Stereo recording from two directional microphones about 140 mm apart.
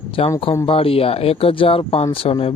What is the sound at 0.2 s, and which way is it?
Speech, 45° left (ahead or behind).